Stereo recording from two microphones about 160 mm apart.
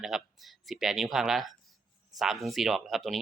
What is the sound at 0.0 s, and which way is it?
A man's voice, centre (ahead or behind).